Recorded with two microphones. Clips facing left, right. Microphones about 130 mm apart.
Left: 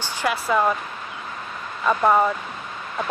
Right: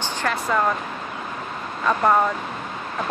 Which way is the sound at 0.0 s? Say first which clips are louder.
Even; 10° left (ahead or behind).